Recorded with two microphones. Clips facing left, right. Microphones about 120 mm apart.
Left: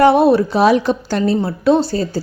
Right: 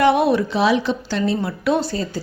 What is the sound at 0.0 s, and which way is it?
A woman's voice, 35° left (ahead or behind).